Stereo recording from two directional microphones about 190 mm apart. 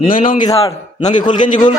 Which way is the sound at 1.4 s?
40° left (ahead or behind).